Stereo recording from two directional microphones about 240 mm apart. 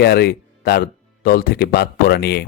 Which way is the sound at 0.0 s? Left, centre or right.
Left.